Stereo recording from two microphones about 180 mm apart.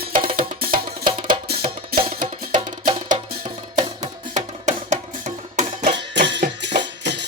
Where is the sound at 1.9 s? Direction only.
50° right (ahead or behind).